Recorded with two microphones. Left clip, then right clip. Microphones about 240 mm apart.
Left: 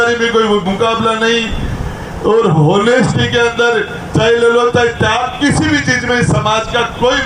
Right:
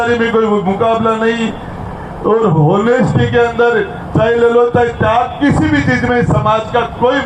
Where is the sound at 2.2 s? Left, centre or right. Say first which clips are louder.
Left 1 dB; left.